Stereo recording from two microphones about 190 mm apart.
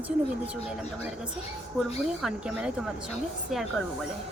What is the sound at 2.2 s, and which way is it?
Speech, 5° right (ahead or behind).